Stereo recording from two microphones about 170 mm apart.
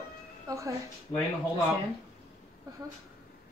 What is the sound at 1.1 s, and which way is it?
Speech, 20° left (ahead or behind).